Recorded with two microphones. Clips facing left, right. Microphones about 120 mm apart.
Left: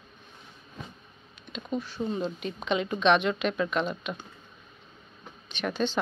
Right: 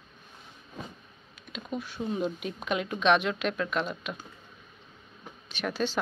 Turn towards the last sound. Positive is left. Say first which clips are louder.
# left 1 dB
turn(degrees=-5)  # may be behind; listen again after turning